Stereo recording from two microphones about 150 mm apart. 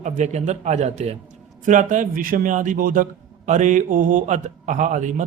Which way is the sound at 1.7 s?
55° right (ahead or behind).